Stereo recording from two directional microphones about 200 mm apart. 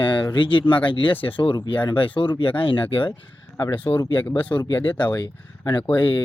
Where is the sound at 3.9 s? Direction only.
10° left (ahead or behind).